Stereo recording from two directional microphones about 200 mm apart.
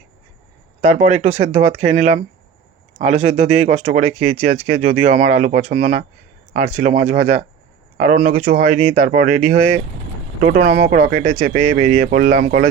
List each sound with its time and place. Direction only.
0.8 s speech: 40° right (ahead or behind)